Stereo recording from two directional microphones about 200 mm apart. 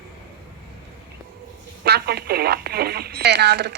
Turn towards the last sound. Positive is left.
turn(degrees=-55)  # may be behind; listen again after turning